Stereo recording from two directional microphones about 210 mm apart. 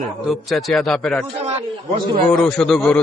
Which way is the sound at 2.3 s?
5° left (ahead or behind).